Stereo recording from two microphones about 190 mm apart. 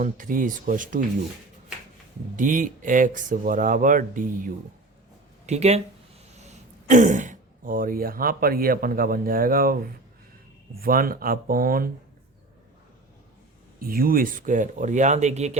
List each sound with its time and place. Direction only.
0.0 s speech: 45° right (ahead or behind)
2.3 s speech: 45° right (ahead or behind)
10.8 s speech: 50° right (ahead or behind)
13.7 s speech: 50° right (ahead or behind)